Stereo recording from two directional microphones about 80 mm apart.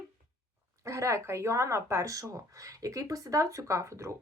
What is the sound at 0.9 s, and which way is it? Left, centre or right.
A woman's voice, right.